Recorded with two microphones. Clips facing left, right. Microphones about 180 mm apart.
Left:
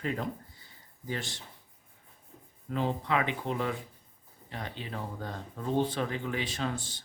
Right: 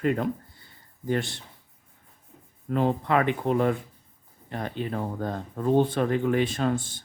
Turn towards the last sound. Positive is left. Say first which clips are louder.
# right 8 dB
turn(degrees=-50)  # may be behind; listen again after turning